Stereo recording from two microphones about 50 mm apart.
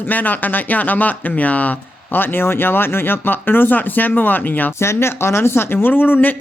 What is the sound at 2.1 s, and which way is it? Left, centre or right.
Speech, left.